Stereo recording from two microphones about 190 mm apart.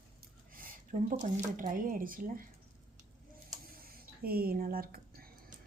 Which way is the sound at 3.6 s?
50° right (ahead or behind).